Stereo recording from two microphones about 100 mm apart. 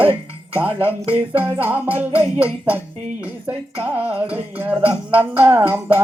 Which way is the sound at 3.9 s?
15° right (ahead or behind).